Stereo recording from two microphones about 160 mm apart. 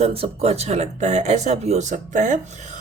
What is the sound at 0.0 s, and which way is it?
Speech, 40° right (ahead or behind).